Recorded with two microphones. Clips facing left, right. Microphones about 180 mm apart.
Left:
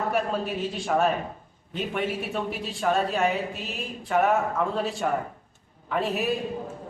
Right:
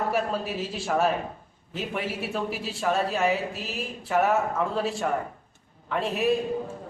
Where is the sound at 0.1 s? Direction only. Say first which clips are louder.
Left 1 dB; centre (ahead or behind).